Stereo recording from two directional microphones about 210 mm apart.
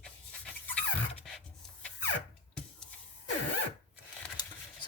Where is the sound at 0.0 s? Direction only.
5° left (ahead or behind).